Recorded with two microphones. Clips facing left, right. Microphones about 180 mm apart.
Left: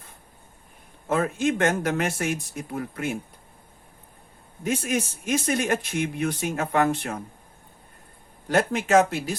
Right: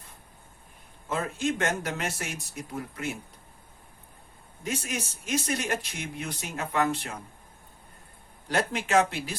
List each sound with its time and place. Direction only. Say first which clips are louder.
1.0 s speech: left 6 dB; 55° left (ahead or behind)
4.6 s speech: left 7 dB; 55° left (ahead or behind)
8.4 s speech: left 6 dB; 45° left (ahead or behind)